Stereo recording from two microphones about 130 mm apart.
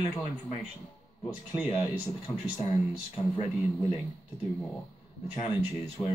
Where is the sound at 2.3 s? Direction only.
5° left (ahead or behind).